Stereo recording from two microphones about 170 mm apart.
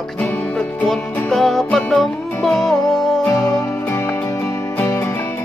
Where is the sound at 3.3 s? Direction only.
20° left (ahead or behind).